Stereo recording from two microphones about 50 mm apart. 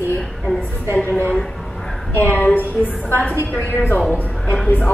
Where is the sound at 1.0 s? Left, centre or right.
Left.